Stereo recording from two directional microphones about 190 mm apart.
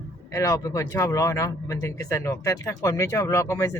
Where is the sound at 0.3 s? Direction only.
15° left (ahead or behind).